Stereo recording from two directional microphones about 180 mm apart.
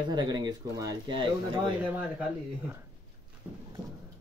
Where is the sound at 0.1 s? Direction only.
25° right (ahead or behind).